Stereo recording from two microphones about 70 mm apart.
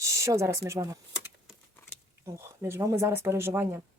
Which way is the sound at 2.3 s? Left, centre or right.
Right.